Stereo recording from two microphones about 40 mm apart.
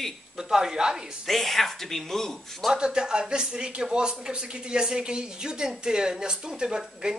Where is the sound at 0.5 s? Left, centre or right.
Centre.